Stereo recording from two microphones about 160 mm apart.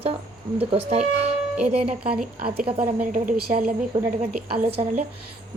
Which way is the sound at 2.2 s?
65° right (ahead or behind).